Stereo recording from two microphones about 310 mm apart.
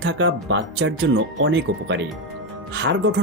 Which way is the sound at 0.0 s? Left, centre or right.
Right.